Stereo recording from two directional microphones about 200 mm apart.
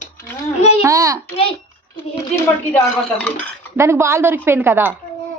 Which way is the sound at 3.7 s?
15° right (ahead or behind).